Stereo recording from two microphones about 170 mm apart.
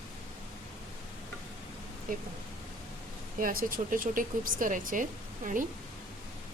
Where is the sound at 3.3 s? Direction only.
55° right (ahead or behind).